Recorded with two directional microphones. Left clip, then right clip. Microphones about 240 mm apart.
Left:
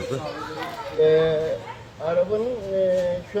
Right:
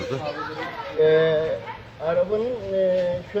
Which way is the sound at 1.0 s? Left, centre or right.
Centre.